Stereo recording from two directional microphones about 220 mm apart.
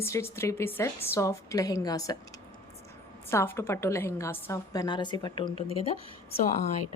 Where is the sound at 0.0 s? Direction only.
10° left (ahead or behind).